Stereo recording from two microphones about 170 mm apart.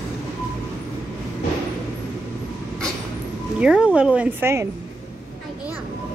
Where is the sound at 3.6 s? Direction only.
5° right (ahead or behind).